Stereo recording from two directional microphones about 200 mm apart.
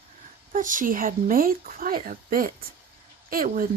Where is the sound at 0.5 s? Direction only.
40° right (ahead or behind).